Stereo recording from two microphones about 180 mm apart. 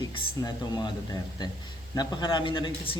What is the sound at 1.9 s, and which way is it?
Speech, 20° left (ahead or behind).